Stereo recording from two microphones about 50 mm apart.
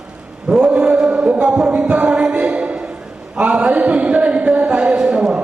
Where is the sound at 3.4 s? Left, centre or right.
Right.